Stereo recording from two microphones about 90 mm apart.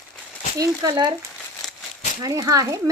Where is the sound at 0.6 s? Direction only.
45° right (ahead or behind).